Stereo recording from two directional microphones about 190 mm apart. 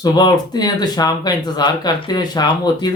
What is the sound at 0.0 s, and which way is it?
Speech, 20° left (ahead or behind).